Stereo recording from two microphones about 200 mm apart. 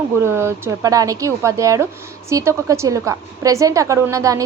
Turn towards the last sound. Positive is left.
turn(degrees=-15)  # may be behind; listen again after turning